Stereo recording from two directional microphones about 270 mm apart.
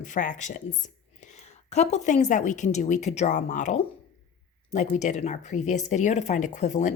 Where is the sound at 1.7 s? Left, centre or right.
Left.